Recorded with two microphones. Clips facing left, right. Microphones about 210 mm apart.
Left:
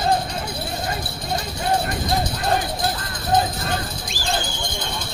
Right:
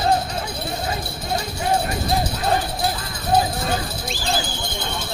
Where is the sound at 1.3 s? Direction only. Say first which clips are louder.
Right 1 dB; 10° right (ahead or behind).